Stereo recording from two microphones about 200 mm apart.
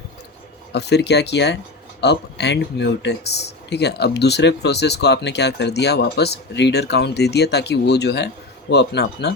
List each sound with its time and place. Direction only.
0.7 s speech: 55° left (ahead or behind)